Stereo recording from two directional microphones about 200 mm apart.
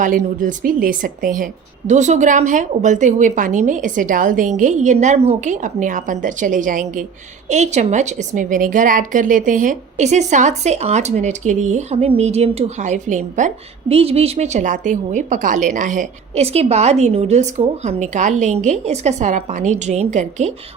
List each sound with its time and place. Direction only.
0.0 s a woman's voice: 40° right (ahead or behind)